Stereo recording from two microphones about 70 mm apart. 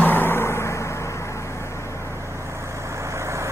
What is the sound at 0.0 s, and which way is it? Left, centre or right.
Vehicle, left.